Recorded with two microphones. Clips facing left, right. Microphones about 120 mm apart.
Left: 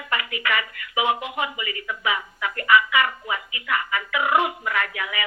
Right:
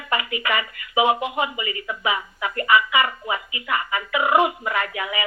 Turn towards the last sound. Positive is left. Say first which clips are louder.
# right 2 dB
turn(degrees=-20)  # may be behind; listen again after turning